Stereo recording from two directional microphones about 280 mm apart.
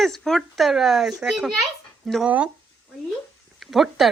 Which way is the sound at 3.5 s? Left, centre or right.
Centre.